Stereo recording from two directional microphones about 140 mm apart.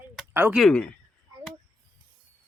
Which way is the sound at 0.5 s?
5° left (ahead or behind).